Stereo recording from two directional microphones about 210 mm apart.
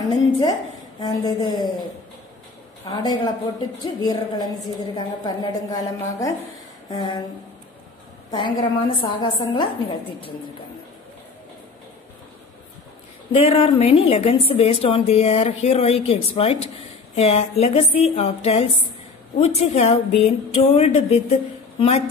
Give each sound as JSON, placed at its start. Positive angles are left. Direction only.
{"t": 0.4, "sound": "a woman's voice", "side_deg": 20}
{"t": 2.9, "sound": "a woman's voice", "side_deg": 20}
{"t": 8.3, "sound": "a woman's voice", "side_deg": 20}
{"t": 13.3, "sound": "a woman's voice", "side_deg": 25}